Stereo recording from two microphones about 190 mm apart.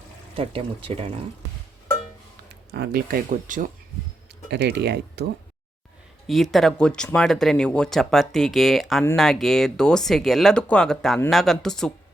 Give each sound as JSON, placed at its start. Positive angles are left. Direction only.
{"t": 0.3, "sound": "speech", "side_deg": -30}
{"t": 2.7, "sound": "speech", "side_deg": -55}
{"t": 4.5, "sound": "speech", "side_deg": -60}
{"t": 6.2, "sound": "speech", "side_deg": 0}